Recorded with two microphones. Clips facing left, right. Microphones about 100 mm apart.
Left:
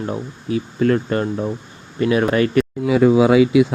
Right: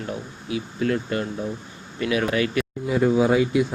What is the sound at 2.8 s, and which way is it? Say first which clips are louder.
Speech: left 6 dB; 90° left.